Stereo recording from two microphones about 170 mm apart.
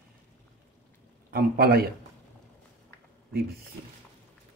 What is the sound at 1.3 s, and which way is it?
Speech, 60° right (ahead or behind).